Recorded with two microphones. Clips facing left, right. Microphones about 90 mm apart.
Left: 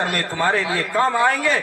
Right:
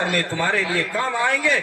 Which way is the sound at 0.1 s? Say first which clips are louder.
Left 1 dB; 35° left (ahead or behind).